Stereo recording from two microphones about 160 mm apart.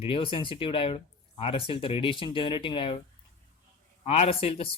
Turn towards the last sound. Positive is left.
turn(degrees=35)  # may be behind; listen again after turning